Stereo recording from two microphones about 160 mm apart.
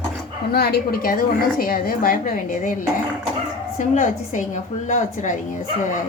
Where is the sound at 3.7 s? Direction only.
55° left (ahead or behind).